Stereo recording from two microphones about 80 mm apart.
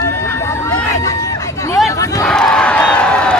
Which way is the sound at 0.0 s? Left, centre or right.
Left.